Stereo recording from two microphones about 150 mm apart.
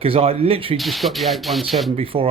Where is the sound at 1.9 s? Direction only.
40° right (ahead or behind).